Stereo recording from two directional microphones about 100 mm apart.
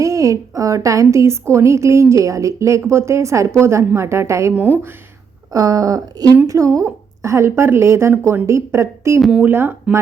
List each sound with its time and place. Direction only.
0.0 s a woman's voice: 30° right (ahead or behind)
5.5 s a woman's voice: 35° right (ahead or behind); by 9.7 s 20° right (ahead or behind)